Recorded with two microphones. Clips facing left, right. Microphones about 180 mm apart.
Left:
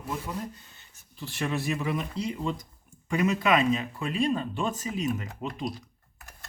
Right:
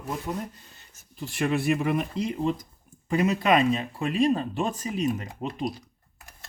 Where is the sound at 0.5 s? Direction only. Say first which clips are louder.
Even; 40° right (ahead or behind).